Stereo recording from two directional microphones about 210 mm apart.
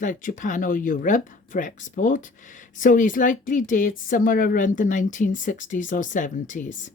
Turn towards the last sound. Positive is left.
turn(degrees=35)  # may be behind; listen again after turning